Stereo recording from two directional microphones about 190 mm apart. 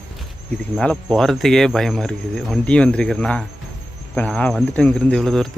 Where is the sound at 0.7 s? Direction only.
5° left (ahead or behind).